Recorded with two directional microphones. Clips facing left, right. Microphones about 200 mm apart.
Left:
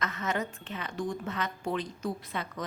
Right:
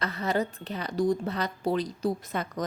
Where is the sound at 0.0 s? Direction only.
35° right (ahead or behind).